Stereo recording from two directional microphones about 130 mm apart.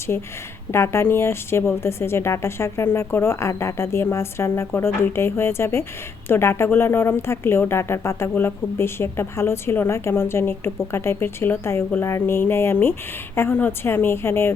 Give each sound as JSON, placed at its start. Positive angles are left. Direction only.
{"t": 0.1, "sound": "a woman's voice", "side_deg": 15}